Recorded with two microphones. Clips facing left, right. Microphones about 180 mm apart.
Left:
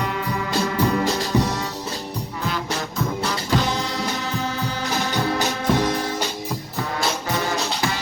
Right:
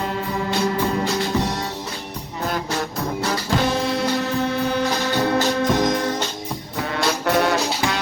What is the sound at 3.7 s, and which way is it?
Music, 60° right (ahead or behind).